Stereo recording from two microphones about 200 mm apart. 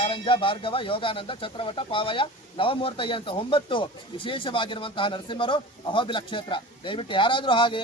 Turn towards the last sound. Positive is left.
turn(degrees=25)  # may be behind; listen again after turning